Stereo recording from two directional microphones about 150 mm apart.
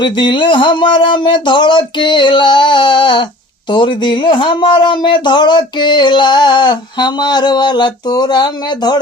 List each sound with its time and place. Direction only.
0.0 s speech: 30° left (ahead or behind)